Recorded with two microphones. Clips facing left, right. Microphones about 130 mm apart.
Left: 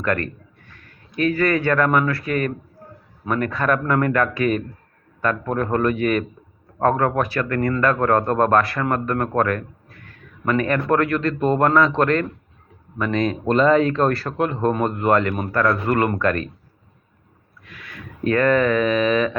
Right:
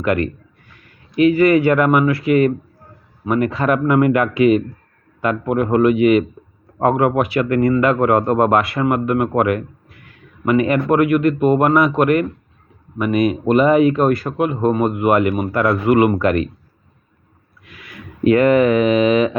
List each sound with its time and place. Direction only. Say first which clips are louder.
0.0 s speech: right 5 dB; 20° right (ahead or behind)
3.5 s speech: right 3 dB; 25° right (ahead or behind)
3.8 s speech: right 5 dB; 15° right (ahead or behind)
18.2 s speech: right 5 dB; 15° right (ahead or behind)